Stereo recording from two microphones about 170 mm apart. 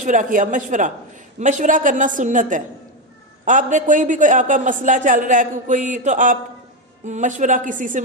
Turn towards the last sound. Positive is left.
turn(degrees=-50)  # may be behind; listen again after turning